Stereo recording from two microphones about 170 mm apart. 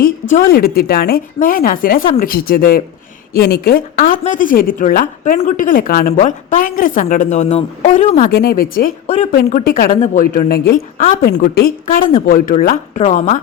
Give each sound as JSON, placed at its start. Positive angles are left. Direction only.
{"t": 0.0, "sound": "a woman's voice", "side_deg": 60}
{"t": 8.3, "sound": "a woman's voice", "side_deg": 70}
{"t": 9.0, "sound": "speech", "side_deg": 40}
{"t": 9.3, "sound": "a woman's voice", "side_deg": 55}